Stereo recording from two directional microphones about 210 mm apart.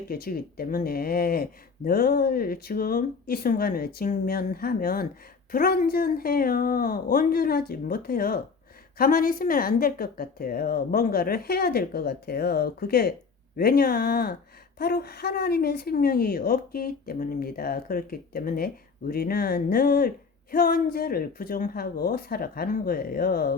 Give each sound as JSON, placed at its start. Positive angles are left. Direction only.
{"t": 0.1, "sound": "speech", "side_deg": 45}